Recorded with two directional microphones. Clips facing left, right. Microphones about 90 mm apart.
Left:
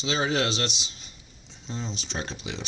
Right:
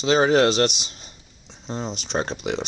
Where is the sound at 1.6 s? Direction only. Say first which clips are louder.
Right 5 dB; 45° right (ahead or behind).